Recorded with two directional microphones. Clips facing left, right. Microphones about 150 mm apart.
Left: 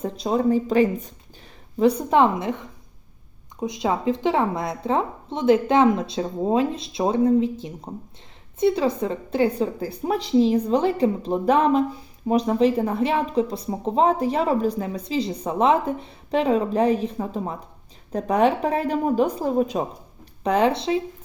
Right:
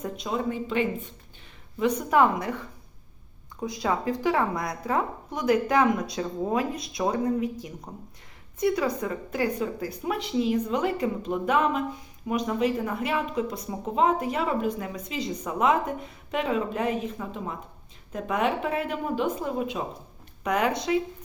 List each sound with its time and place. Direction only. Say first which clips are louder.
0.0 s a woman's voice: left 7 dB; 35° left (ahead or behind)